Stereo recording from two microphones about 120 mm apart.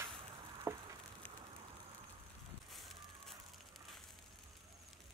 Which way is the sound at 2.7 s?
Centre (ahead or behind).